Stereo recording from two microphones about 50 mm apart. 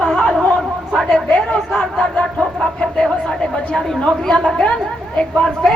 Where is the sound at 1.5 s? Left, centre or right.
Left.